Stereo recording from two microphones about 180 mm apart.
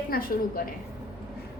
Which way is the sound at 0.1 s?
50° left (ahead or behind).